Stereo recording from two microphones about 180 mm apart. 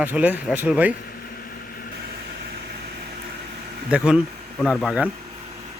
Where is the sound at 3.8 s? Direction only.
5° right (ahead or behind).